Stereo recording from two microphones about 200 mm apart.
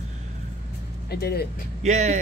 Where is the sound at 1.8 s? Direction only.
35° right (ahead or behind).